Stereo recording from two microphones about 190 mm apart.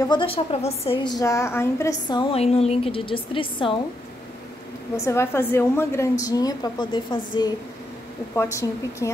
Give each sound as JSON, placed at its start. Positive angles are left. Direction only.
{"t": 0.0, "sound": "a woman's voice", "side_deg": 25}
{"t": 1.0, "sound": "a woman's voice", "side_deg": 20}
{"t": 4.9, "sound": "a woman's voice", "side_deg": 15}